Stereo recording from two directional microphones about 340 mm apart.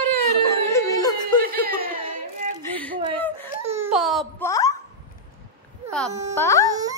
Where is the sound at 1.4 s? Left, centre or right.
Right.